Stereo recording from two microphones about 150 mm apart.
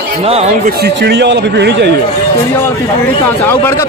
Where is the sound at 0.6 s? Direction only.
90° right.